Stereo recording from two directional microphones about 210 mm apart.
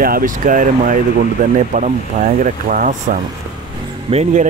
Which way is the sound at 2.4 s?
40° right (ahead or behind).